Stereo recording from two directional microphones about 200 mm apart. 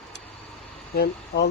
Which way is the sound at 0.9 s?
50° left (ahead or behind).